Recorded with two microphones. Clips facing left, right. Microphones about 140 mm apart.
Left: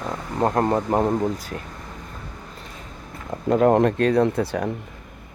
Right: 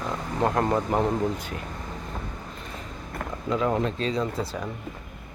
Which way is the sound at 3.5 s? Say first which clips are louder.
Left 8 dB; 55° left (ahead or behind).